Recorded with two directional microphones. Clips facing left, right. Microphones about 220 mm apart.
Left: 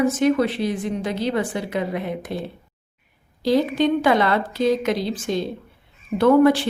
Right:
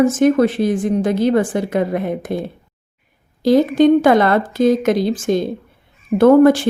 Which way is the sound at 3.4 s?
45° right (ahead or behind).